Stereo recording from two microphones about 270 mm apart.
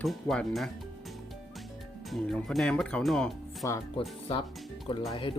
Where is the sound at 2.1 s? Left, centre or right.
Centre.